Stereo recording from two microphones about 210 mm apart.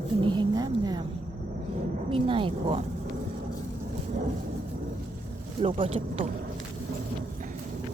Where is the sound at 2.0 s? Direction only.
25° right (ahead or behind).